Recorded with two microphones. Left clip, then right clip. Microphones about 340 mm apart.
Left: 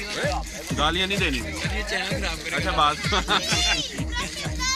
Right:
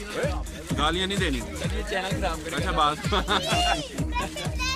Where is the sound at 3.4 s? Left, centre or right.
Right.